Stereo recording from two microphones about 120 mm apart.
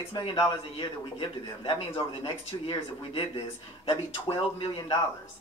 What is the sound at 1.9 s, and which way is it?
Speech, 50° left (ahead or behind).